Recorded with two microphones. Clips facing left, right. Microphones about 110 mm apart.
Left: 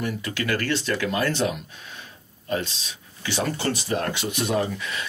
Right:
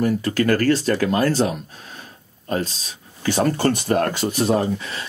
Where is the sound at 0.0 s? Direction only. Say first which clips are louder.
Right 9 dB; 40° right (ahead or behind).